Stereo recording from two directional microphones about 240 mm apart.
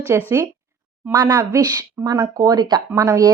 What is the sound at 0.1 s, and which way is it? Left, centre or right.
A woman's voice, centre.